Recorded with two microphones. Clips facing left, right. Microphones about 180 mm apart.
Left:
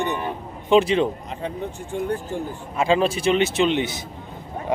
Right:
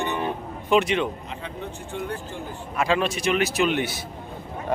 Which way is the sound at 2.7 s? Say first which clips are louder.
Left 4 dB; 25° left (ahead or behind).